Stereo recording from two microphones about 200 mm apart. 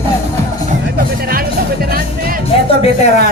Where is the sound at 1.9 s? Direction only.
45° right (ahead or behind).